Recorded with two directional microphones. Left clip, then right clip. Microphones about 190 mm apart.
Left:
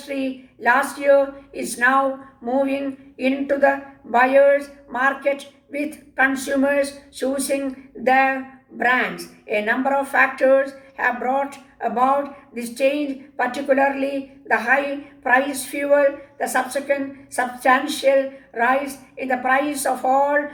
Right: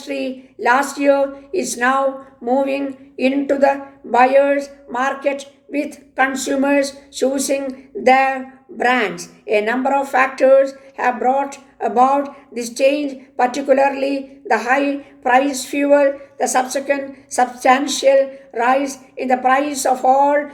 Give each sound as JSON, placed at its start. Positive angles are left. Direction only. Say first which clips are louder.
{"t": 0.1, "sound": "speech", "louder": "right 3 dB", "side_deg": -50}